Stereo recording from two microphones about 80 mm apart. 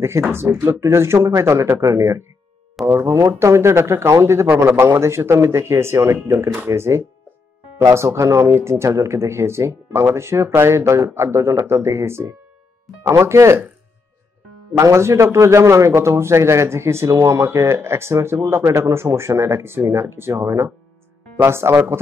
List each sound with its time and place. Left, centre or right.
0.3 s a man's voice: right
14.7 s a man's voice: right